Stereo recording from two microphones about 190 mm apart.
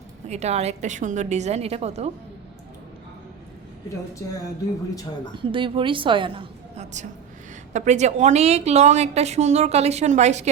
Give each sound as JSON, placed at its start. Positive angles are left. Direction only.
{"t": 0.3, "sound": "a woman's voice", "side_deg": -35}
{"t": 5.4, "sound": "a woman's voice", "side_deg": -25}